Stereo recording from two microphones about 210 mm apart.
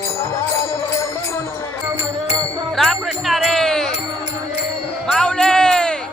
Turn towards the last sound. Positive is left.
turn(degrees=5)  # may be behind; listen again after turning